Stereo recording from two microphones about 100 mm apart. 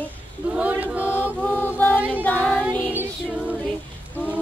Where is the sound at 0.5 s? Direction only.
15° right (ahead or behind).